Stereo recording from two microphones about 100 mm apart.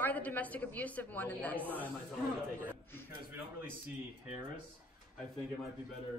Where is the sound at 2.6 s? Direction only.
20° left (ahead or behind).